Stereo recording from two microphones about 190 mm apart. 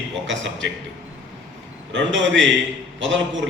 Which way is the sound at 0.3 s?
75° right (ahead or behind).